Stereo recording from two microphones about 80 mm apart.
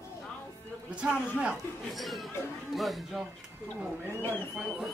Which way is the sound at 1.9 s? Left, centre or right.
Centre.